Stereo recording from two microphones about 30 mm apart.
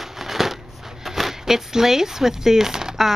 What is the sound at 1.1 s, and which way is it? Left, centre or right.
Speech, centre.